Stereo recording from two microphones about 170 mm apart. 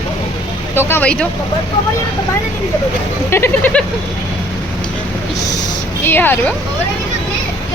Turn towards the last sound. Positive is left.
turn(degrees=10)  # may be behind; listen again after turning